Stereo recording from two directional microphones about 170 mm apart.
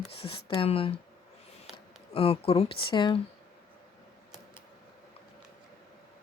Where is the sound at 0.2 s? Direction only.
30° left (ahead or behind).